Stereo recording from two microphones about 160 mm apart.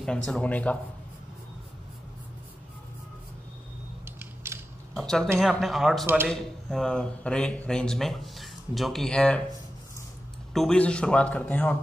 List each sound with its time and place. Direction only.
0.0 s speech: 5° left (ahead or behind)
4.0 s mechanisms: 15° right (ahead or behind)
4.9 s speech: 5° left (ahead or behind)
10.5 s speech: 5° left (ahead or behind)